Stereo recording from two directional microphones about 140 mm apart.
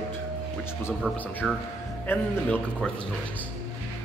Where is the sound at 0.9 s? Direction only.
15° left (ahead or behind).